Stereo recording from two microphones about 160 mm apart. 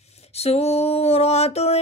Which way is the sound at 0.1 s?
40° left (ahead or behind).